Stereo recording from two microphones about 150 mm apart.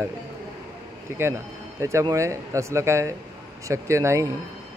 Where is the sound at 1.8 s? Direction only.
20° right (ahead or behind).